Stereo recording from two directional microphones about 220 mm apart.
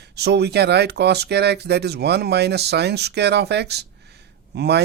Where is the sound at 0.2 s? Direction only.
50° right (ahead or behind).